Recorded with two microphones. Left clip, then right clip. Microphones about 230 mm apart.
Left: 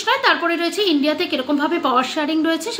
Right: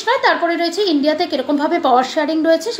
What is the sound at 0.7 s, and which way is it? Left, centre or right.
Speech, left.